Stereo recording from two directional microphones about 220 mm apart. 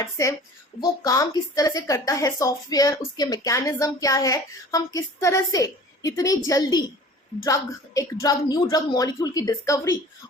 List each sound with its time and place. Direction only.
0.0 s speech: 15° left (ahead or behind)